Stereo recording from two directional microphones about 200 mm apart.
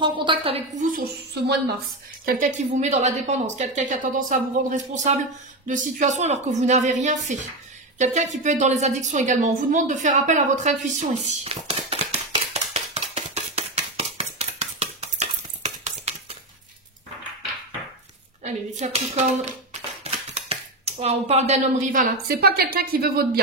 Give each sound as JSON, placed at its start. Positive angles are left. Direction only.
{"t": 0.0, "sound": "a woman's voice", "side_deg": -25}
{"t": 2.2, "sound": "a woman's voice", "side_deg": -40}
{"t": 12.7, "sound": "a sound", "side_deg": -30}
{"t": 18.4, "sound": "a woman's voice", "side_deg": -35}